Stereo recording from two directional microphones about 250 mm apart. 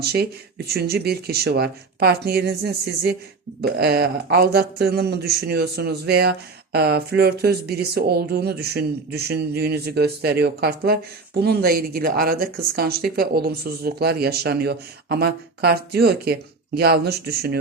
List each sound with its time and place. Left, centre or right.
0.0 s speech: right